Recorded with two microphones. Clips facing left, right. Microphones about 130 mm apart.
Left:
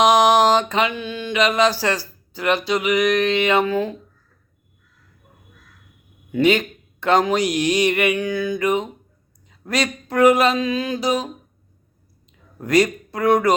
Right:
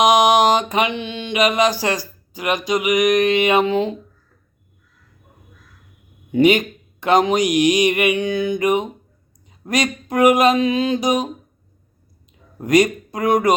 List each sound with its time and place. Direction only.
0.0 s mantra: 15° right (ahead or behind)
6.3 s speech: 15° right (ahead or behind)
12.5 s speech: 15° right (ahead or behind)